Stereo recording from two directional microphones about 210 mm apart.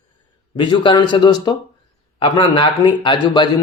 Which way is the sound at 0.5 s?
25° left (ahead or behind).